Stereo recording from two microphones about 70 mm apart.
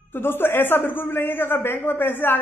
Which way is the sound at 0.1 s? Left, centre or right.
Left.